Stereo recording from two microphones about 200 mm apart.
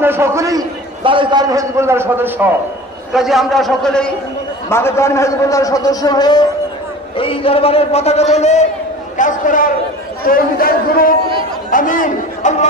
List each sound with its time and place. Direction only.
0.0 s a man's voice: 10° right (ahead or behind); by 12.6 s 40° left (ahead or behind)